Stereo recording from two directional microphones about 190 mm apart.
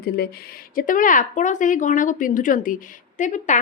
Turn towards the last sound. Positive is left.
turn(degrees=40)  # may be behind; listen again after turning